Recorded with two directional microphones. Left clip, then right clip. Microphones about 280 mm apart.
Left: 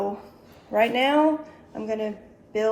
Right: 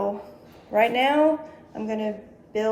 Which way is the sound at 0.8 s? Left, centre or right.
Centre.